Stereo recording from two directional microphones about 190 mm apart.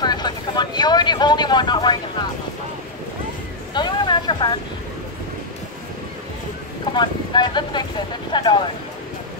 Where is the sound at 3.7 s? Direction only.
25° left (ahead or behind).